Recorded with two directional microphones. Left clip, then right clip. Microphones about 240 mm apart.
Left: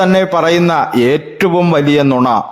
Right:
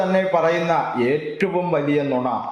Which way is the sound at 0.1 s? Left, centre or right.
Left.